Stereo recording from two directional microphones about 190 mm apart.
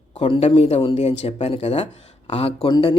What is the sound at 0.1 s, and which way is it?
Speech, 35° left (ahead or behind).